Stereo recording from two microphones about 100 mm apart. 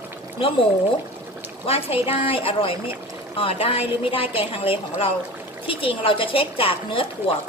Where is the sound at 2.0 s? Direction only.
70° left (ahead or behind).